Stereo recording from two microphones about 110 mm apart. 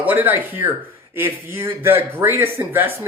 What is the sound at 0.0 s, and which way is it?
Speech, 15° right (ahead or behind).